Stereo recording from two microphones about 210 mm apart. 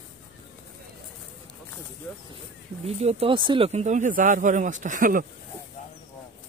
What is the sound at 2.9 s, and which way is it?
Speech, 30° right (ahead or behind).